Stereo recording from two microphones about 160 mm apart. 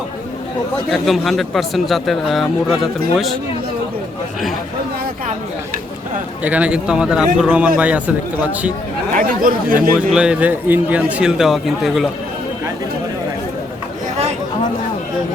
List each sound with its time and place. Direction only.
0.9 s speech: centre (ahead or behind)
6.4 s speech: 10° right (ahead or behind)
9.1 s speech: 60° right (ahead or behind)
10.1 s speech: 5° right (ahead or behind)